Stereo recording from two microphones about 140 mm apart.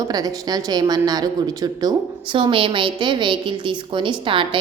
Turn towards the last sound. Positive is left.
turn(degrees=-40)  # may be behind; listen again after turning